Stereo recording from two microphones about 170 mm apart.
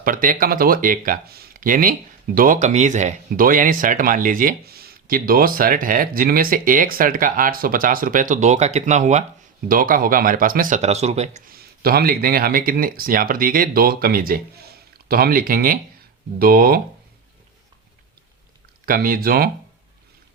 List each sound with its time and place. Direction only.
0.0 s speech: 55° right (ahead or behind)
9.6 s speech: 55° right (ahead or behind); by 11.4 s 40° right (ahead or behind)
11.4 s speech: 60° right (ahead or behind)
18.9 s speech: 55° right (ahead or behind)